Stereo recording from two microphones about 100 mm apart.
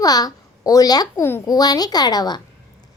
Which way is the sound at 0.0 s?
40° left (ahead or behind).